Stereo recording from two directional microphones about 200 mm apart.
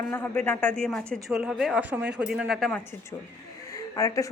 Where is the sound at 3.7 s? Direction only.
15° left (ahead or behind).